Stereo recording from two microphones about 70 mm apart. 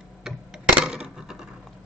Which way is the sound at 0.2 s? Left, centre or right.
Centre.